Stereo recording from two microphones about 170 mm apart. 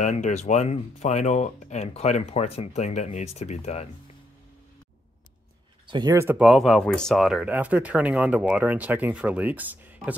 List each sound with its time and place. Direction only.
0.0 s speech: 45° left (ahead or behind)
5.9 s speech: 25° right (ahead or behind)
6.1 s speech: 15° right (ahead or behind)
6.4 s speech: centre (ahead or behind)